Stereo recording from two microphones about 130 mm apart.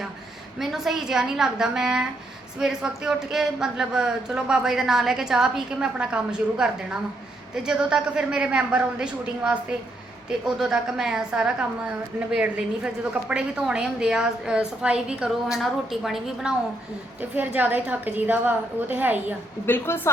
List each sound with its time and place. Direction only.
0.6 s a woman's voice: centre (ahead or behind)
17.2 s a woman's voice: 15° right (ahead or behind)
19.6 s a woman's voice: 15° left (ahead or behind)